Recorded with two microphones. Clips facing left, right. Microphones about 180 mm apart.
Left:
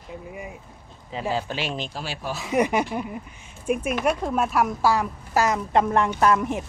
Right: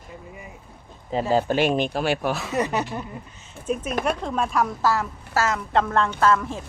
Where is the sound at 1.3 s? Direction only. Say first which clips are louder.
Right 8 dB; 45° right (ahead or behind).